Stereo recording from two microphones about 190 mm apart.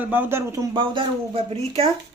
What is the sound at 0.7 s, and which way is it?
Speech, 25° right (ahead or behind).